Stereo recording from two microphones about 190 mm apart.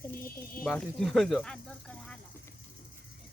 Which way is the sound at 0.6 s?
Centre (ahead or behind).